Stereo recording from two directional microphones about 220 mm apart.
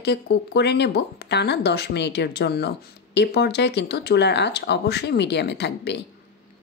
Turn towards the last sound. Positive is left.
turn(degrees=50)  # may be behind; listen again after turning